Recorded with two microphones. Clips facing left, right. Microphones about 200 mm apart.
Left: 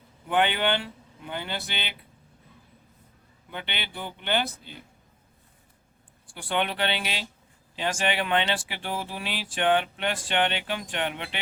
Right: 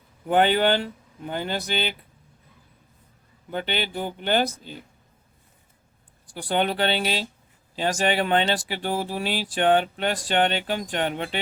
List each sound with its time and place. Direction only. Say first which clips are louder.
0.3 s speech: right 5 dB; 40° right (ahead or behind)
3.5 s speech: right 9 dB; 40° right (ahead or behind)
6.3 s speech: right 4 dB; 40° right (ahead or behind)